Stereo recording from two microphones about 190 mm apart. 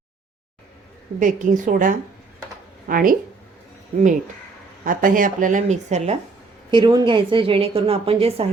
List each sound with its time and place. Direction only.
1.2 s speech: 45° right (ahead or behind)
4.8 s speech: 45° right (ahead or behind)
6.7 s a woman's voice: 25° right (ahead or behind)